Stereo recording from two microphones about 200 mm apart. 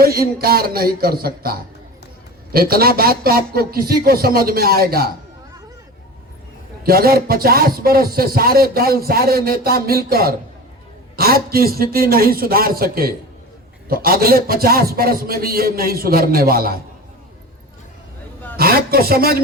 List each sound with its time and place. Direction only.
0.0 s speech: 50° right (ahead or behind)
6.8 s speech: 50° right (ahead or behind)
18.5 s a man's voice: 50° right (ahead or behind)